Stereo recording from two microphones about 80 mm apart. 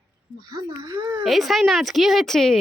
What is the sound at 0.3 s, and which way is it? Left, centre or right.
Speech, right.